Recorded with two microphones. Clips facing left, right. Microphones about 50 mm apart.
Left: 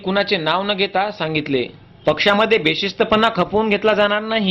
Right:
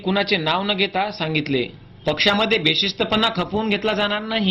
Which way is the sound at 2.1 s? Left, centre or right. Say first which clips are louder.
Left 4 dB; left.